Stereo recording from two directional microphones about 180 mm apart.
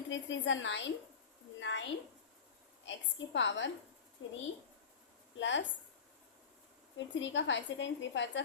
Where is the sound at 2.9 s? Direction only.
90° left.